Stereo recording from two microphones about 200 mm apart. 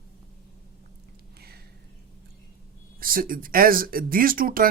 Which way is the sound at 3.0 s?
45° right (ahead or behind).